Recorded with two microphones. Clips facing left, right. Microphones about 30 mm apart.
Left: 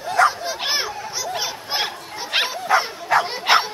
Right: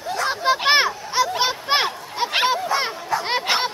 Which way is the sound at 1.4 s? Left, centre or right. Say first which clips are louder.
Right 5 dB; right.